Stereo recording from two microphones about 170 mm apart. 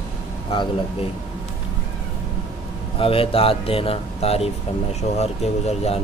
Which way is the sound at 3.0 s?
35° left (ahead or behind).